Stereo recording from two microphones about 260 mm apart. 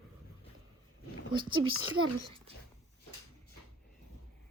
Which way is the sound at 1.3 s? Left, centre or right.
Centre.